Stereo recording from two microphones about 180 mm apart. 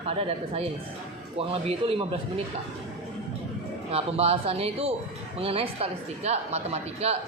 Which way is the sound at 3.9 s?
35° right (ahead or behind).